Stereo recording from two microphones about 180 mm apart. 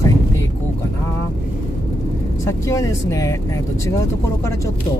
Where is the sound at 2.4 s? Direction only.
15° left (ahead or behind).